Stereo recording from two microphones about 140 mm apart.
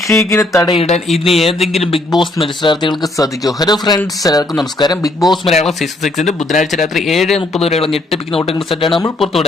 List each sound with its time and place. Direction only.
0.2 s speech: 20° left (ahead or behind)
0.8 s speech: 50° left (ahead or behind)
1.0 s speech: centre (ahead or behind)
1.8 s speech: 40° left (ahead or behind)
5.2 s speech: centre (ahead or behind)
7.6 s speech: 45° left (ahead or behind)
7.9 s speech: centre (ahead or behind)